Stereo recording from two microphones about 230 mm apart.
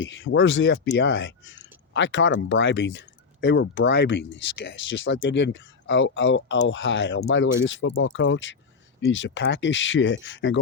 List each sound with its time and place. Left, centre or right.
0.0 s speech: left